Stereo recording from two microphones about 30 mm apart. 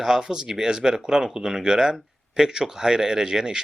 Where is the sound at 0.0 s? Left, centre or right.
Right.